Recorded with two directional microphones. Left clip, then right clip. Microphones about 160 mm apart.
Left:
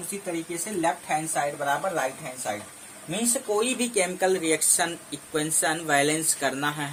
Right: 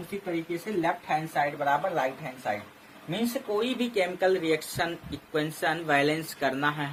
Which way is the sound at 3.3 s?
20° left (ahead or behind).